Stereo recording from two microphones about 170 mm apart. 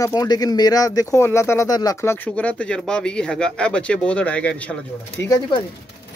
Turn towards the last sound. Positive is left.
turn(degrees=20)  # may be behind; listen again after turning